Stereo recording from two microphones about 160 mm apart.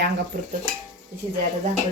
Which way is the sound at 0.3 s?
70° right (ahead or behind).